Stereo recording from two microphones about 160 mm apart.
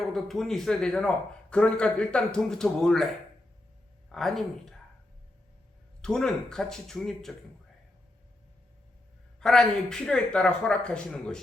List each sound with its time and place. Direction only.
0.0 s a man's voice: centre (ahead or behind)
4.1 s a man's voice: centre (ahead or behind)
6.0 s a man's voice: 5° left (ahead or behind)
9.4 s a man's voice: 5° left (ahead or behind)